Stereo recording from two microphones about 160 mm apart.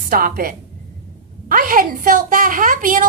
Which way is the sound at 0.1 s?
65° right (ahead or behind).